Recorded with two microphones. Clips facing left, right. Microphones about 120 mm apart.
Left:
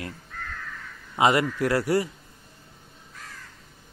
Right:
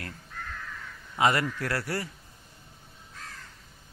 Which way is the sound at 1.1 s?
20° left (ahead or behind).